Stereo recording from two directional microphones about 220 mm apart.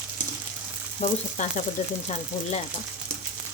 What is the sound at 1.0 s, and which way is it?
Frying, 35° left (ahead or behind).